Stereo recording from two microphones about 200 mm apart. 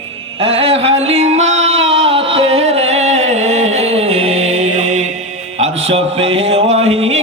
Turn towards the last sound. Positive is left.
turn(degrees=-30)  # may be behind; listen again after turning